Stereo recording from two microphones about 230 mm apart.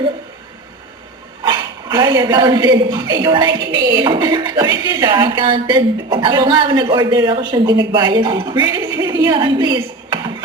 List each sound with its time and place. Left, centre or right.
1.5 s speech: centre